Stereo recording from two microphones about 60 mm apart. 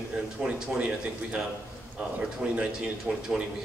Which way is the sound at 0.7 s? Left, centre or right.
Right.